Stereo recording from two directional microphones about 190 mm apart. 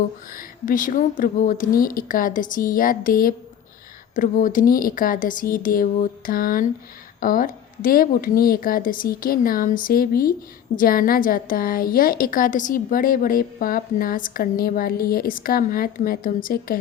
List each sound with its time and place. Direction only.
0.3 s a woman's voice: 45° left (ahead or behind)